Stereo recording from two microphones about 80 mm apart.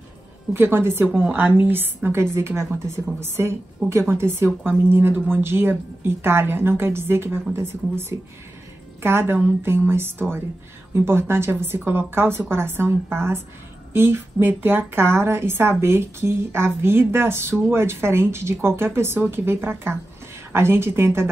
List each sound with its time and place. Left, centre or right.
0.5 s speech: right